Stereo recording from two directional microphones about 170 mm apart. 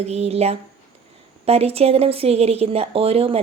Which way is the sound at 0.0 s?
40° right (ahead or behind).